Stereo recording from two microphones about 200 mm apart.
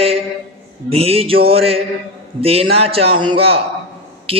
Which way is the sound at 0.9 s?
30° right (ahead or behind).